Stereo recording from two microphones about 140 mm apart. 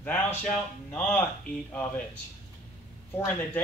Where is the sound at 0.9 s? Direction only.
10° left (ahead or behind).